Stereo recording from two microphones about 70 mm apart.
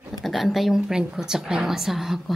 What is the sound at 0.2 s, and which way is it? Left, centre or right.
A woman's voice, centre.